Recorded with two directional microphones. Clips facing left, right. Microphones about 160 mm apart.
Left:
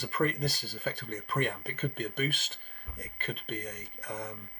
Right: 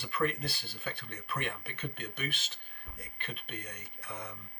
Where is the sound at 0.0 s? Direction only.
40° left (ahead or behind).